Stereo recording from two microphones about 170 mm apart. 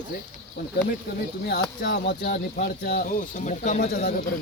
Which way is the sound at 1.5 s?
85° left.